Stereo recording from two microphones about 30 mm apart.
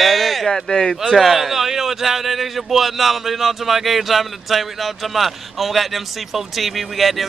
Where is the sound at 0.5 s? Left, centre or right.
Centre.